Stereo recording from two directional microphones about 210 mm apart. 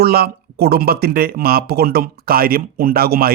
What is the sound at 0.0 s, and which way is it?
Speech, 50° right (ahead or behind).